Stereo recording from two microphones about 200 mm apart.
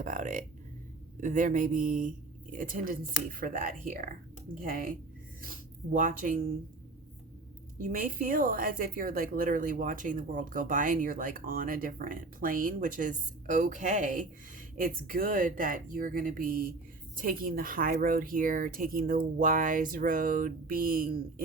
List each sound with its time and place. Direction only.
0.0 s speech: 40° right (ahead or behind)
7.9 s speech: 45° right (ahead or behind)